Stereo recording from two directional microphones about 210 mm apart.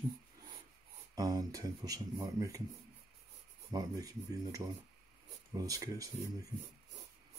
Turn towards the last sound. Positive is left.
turn(degrees=-15)  # may be behind; listen again after turning